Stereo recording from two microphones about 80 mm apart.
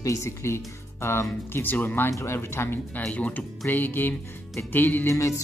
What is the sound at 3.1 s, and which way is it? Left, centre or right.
Speech, centre.